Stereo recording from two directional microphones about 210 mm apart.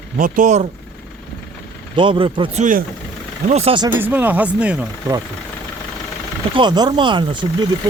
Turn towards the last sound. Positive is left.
turn(degrees=-20)  # may be behind; listen again after turning